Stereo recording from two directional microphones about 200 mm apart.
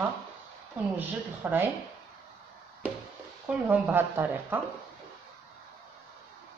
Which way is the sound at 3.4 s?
10° right (ahead or behind).